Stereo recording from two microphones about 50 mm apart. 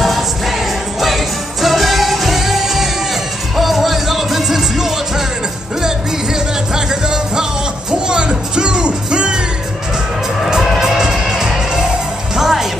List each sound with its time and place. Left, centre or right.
0.0 s music: centre
10.4 s music: centre